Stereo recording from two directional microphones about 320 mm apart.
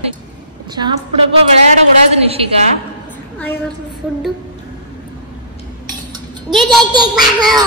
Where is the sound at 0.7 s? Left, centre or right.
Centre.